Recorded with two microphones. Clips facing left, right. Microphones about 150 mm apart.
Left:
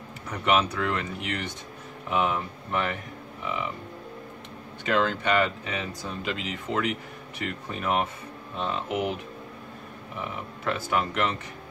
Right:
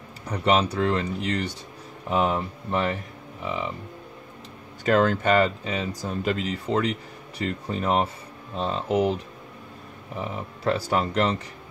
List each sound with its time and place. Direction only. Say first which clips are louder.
0.3 s speech: right 2 dB; 35° right (ahead or behind)
4.8 s speech: right 5 dB; 45° right (ahead or behind)